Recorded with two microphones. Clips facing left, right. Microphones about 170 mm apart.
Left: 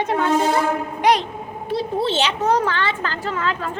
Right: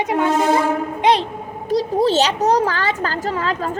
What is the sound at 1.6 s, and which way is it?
A child's voice, 40° right (ahead or behind).